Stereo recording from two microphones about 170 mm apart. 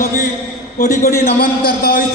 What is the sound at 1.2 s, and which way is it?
Speech, 60° left (ahead or behind).